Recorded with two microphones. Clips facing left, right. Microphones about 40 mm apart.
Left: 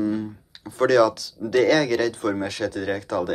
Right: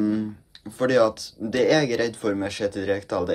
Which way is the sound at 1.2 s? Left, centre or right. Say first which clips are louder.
Left 3 dB; left.